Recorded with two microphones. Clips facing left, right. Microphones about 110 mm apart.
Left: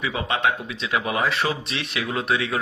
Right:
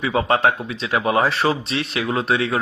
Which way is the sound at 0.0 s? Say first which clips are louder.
Right 6 dB; 35° right (ahead or behind).